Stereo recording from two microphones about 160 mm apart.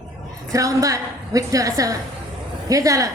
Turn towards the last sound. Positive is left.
turn(degrees=-20)  # may be behind; listen again after turning